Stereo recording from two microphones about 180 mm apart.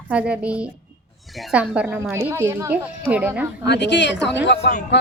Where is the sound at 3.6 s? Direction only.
75° left (ahead or behind).